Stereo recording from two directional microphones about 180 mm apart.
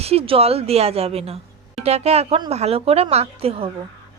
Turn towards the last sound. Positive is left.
turn(degrees=-35)  # may be behind; listen again after turning